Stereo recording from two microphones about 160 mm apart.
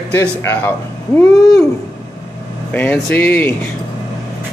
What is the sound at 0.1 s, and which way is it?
Speech, 15° left (ahead or behind).